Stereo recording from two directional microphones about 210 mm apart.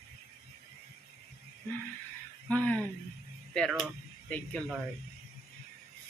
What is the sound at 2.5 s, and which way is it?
Speech, 5° left (ahead or behind).